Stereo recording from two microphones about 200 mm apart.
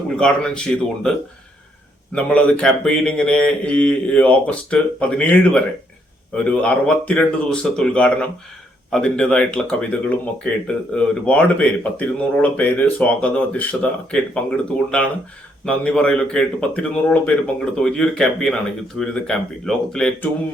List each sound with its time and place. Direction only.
0.2 s a man's voice: 5° left (ahead or behind)
2.1 s a man's voice: 5° left (ahead or behind)